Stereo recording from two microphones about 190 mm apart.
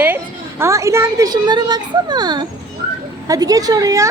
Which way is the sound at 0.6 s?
15° right (ahead or behind).